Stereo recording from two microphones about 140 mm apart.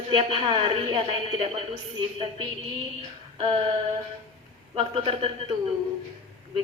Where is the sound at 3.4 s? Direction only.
40° right (ahead or behind).